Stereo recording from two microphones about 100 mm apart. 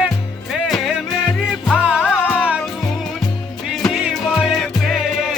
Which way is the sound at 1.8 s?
15° right (ahead or behind).